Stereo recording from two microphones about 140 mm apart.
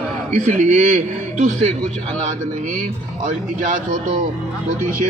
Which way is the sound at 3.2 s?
65° right (ahead or behind).